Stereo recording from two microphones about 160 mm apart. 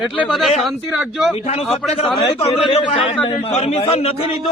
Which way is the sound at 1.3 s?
40° left (ahead or behind).